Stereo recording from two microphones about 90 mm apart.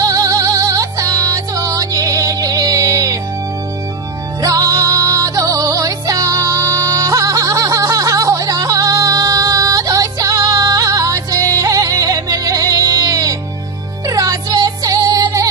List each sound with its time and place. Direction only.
0.0 s music: 40° right (ahead or behind)
4.4 s music: 40° right (ahead or behind)